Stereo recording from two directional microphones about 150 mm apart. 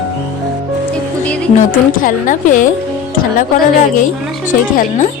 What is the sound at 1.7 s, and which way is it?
Speech, 60° left (ahead or behind).